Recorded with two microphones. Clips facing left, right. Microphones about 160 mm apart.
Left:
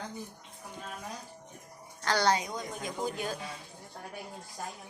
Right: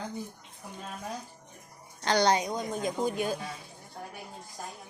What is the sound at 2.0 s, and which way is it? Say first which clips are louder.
A woman's voice: right 3 dB; 20° right (ahead or behind).